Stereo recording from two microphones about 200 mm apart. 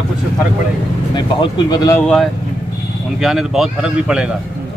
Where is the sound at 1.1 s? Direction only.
20° left (ahead or behind).